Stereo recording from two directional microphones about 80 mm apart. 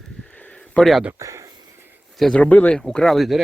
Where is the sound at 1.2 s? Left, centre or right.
Right.